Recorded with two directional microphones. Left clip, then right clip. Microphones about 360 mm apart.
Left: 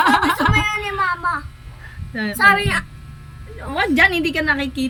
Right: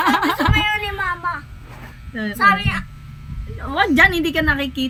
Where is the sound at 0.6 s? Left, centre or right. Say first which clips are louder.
Even; centre.